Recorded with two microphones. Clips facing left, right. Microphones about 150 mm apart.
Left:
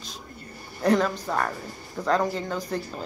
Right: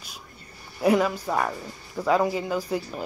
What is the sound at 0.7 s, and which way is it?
Speech, 10° right (ahead or behind).